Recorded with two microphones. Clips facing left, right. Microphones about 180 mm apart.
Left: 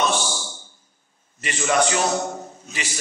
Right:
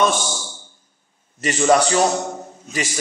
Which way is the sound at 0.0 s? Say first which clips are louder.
Right 4 dB; 50° right (ahead or behind).